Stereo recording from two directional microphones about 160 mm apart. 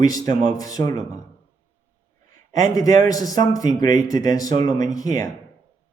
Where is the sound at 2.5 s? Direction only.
20° left (ahead or behind).